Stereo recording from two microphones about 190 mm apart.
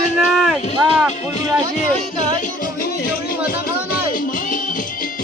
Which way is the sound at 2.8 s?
50° left (ahead or behind).